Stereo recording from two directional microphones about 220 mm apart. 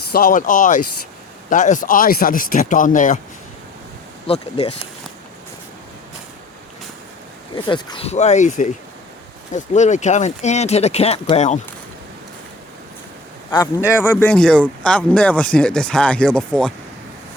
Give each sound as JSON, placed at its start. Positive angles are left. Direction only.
{"t": 0.1, "sound": "speech", "side_deg": 40}
{"t": 4.3, "sound": "speech", "side_deg": 25}
{"t": 7.5, "sound": "speech", "side_deg": 20}
{"t": 14.0, "sound": "speech", "side_deg": 5}